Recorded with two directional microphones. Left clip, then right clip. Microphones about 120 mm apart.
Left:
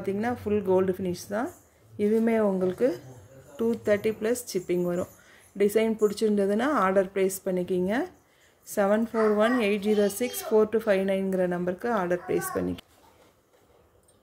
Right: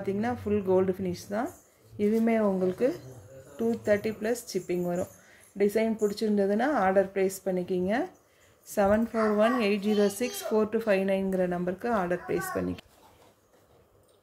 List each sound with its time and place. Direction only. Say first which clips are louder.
0.0 s a woman's voice: left 2 dB; 25° left (ahead or behind)